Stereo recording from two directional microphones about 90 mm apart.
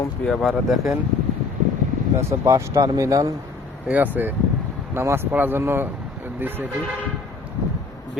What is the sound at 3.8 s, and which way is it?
Speech, 20° right (ahead or behind).